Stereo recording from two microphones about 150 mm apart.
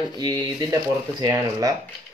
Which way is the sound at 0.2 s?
25° right (ahead or behind).